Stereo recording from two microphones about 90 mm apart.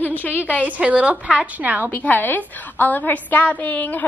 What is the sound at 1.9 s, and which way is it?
A woman's voice, 20° left (ahead or behind).